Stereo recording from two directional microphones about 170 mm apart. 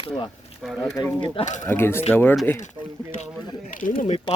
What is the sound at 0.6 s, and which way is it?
Speech, centre (ahead or behind).